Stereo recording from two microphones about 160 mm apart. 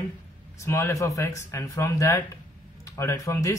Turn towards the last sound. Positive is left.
turn(degrees=20)  # may be behind; listen again after turning